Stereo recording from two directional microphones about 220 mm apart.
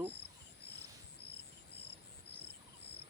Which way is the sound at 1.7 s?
50° left (ahead or behind).